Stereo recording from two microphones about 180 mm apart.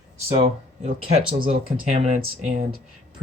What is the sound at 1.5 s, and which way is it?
Speech, 40° right (ahead or behind).